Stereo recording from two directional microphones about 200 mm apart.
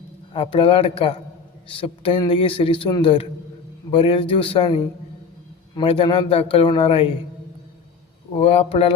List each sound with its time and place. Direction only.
0.3 s a man's voice: 25° left (ahead or behind)
8.4 s a man's voice: 30° left (ahead or behind)